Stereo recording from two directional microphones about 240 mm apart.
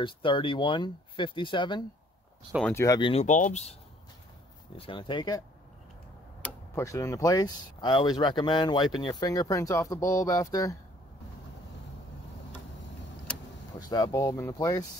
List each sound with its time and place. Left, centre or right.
0.0 s speech: left
4.7 s speech: left
6.4 s speech: centre
13.7 s speech: centre